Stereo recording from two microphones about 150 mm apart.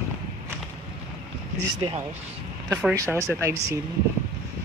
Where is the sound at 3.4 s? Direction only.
15° right (ahead or behind).